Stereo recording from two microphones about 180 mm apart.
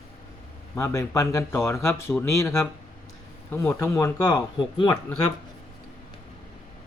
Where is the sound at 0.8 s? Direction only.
15° left (ahead or behind).